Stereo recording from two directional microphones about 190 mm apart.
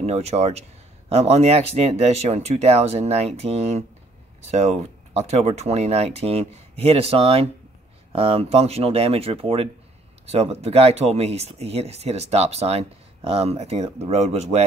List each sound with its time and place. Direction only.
0.0 s speech: 35° right (ahead or behind)